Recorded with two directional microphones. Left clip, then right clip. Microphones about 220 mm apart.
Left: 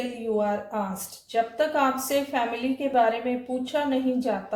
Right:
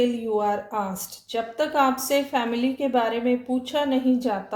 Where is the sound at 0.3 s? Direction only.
45° right (ahead or behind).